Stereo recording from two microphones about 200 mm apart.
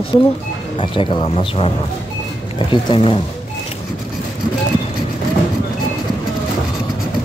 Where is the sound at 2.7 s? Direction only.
25° left (ahead or behind).